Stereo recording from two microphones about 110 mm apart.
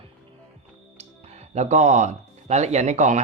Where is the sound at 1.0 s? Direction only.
90° right.